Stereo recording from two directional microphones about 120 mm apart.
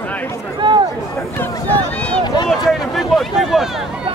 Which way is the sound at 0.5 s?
40° right (ahead or behind).